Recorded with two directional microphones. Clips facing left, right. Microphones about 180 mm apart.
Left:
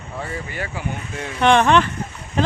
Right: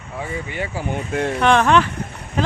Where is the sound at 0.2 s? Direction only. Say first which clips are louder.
Right 2 dB; 20° right (ahead or behind).